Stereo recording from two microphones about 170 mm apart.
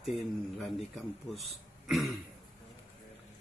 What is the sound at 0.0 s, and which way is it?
Speech, centre (ahead or behind).